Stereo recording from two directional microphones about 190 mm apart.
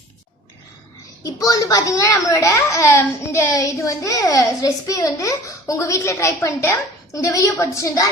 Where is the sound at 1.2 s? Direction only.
20° left (ahead or behind).